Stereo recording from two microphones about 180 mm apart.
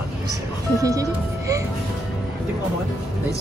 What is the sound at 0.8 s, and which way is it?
Speech, 20° right (ahead or behind).